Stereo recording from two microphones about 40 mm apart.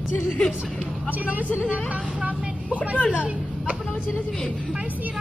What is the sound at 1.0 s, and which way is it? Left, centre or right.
Speech, right.